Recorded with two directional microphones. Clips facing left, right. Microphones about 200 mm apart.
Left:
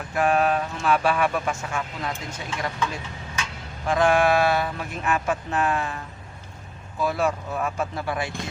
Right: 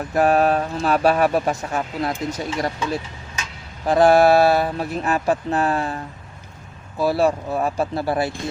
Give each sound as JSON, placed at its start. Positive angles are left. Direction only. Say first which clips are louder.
{"t": 0.1, "sound": "speech", "louder": "right 4 dB", "side_deg": -40}
{"t": 7.0, "sound": "speech", "louder": "right 6 dB", "side_deg": -35}